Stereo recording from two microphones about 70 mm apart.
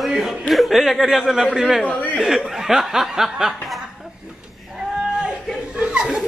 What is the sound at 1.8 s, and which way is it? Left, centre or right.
Speech, left.